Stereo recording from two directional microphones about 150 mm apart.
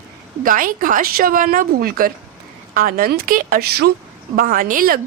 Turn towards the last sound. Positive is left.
turn(degrees=-70)  # may be behind; listen again after turning